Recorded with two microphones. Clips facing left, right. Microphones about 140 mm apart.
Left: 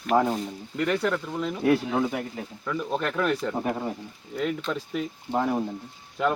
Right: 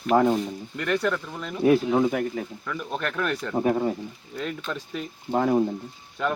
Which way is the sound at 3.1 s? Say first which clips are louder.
Left 2 dB; 5° left (ahead or behind).